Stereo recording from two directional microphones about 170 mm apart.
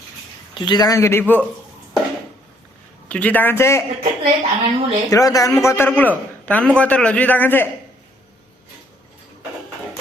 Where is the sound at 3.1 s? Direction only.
10° left (ahead or behind).